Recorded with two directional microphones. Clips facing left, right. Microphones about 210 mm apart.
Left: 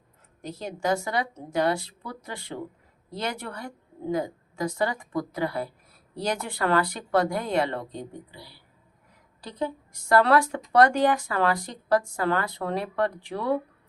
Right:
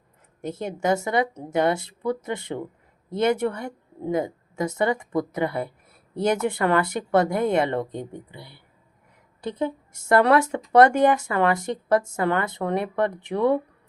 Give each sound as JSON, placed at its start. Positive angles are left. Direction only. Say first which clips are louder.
{"t": 0.5, "sound": "speech", "louder": "right 3 dB", "side_deg": -20}